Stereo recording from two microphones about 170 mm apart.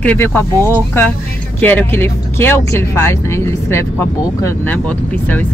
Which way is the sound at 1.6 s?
10° left (ahead or behind).